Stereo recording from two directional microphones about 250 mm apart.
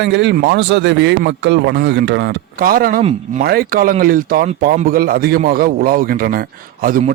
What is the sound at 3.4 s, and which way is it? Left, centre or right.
Speech, right.